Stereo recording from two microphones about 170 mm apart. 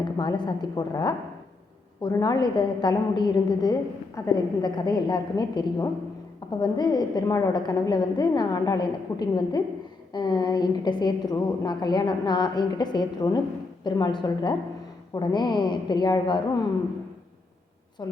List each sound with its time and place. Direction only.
0.0 s a woman's voice: 25° left (ahead or behind)
18.0 s a woman's voice: 20° left (ahead or behind)